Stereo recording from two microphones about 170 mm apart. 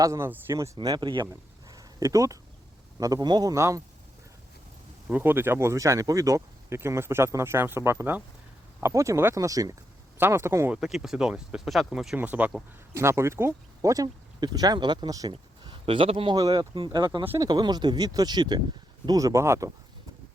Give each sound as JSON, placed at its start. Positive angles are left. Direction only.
{"t": 0.0, "sound": "speech", "side_deg": -15}
{"t": 0.8, "sound": "speech", "side_deg": -25}
{"t": 5.0, "sound": "speech", "side_deg": -10}
{"t": 10.8, "sound": "speech", "side_deg": 0}